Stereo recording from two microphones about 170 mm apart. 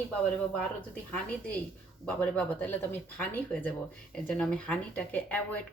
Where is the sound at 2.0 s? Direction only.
5° left (ahead or behind).